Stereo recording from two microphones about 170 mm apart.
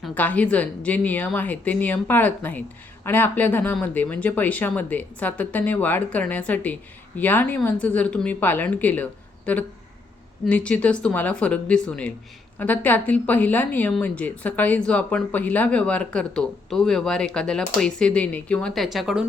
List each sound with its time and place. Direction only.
0.0 s a woman's voice: 10° left (ahead or behind)